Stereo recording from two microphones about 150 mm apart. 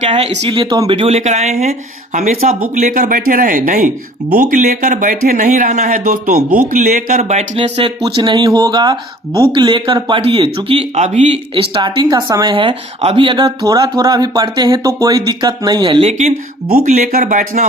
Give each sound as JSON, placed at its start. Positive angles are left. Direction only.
{"t": 0.1, "sound": "speech", "side_deg": -40}
{"t": 2.7, "sound": "speech", "side_deg": -60}
{"t": 8.0, "sound": "speech", "side_deg": -30}
{"t": 17.1, "sound": "speech", "side_deg": -60}